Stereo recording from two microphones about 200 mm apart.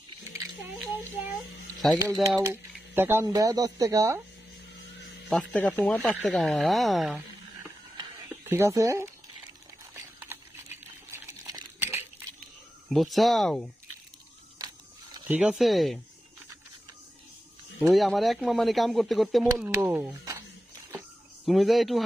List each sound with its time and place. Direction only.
1.8 s speech: 5° left (ahead or behind)
2.2 s speech: 15° right (ahead or behind)
5.3 s speech: 5° left (ahead or behind)
8.0 s a sound: 15° right (ahead or behind)
10.3 s a sound: 10° right (ahead or behind)
12.9 s speech: centre (ahead or behind)
14.6 s a sound: 20° right (ahead or behind)
15.1 s speech: 10° right (ahead or behind)
17.7 s speech: centre (ahead or behind)
19.4 s speech: 15° right (ahead or behind)
21.5 s speech: centre (ahead or behind)